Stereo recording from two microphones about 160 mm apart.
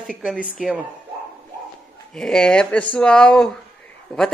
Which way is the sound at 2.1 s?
5° left (ahead or behind).